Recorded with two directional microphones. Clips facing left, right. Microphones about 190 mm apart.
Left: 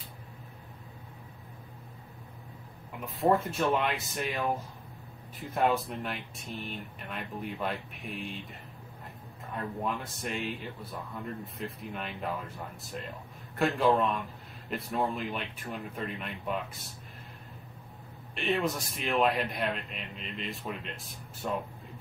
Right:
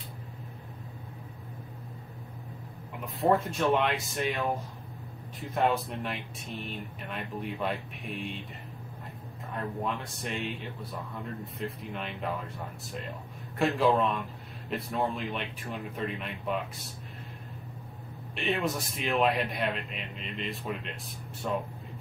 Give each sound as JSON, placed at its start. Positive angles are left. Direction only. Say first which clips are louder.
{"t": 3.2, "sound": "a man's voice", "louder": "even", "side_deg": 0}
{"t": 9.8, "sound": "a man's voice", "louder": "even", "side_deg": 0}
{"t": 13.6, "sound": "a man's voice", "louder": "right 1 dB", "side_deg": 0}
{"t": 18.3, "sound": "a man's voice", "louder": "even", "side_deg": 0}